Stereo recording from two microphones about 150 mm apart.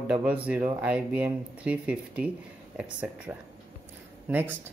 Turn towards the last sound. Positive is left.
turn(degrees=-15)  # may be behind; listen again after turning